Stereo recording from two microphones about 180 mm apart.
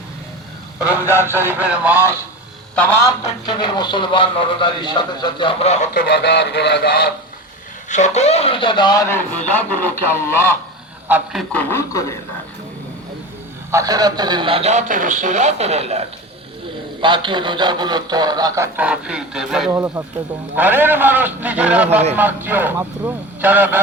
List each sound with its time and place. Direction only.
0.9 s a man's voice: 10° right (ahead or behind)
3.5 s speech: 25° left (ahead or behind); by 6.1 s 45° left (ahead or behind)
6.1 s speech: 75° left (ahead or behind); by 7.1 s 60° left (ahead or behind)
7.9 s speech: 40° left (ahead or behind); by 10.5 s 15° left (ahead or behind)
11.1 s a man's voice: 5° right (ahead or behind)
11.5 s speech: 15° left (ahead or behind)
13.7 s a man's voice: 20° right (ahead or behind); by 19.7 s centre (ahead or behind)
19.7 s a man's voice: 15° right (ahead or behind)